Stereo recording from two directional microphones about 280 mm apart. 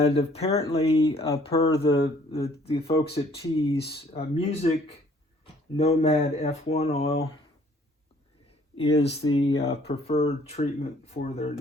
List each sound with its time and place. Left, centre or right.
0.0 s speech: left
5.7 s speech: left
8.7 s speech: left